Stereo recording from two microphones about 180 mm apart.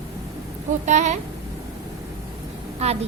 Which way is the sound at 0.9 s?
40° right (ahead or behind).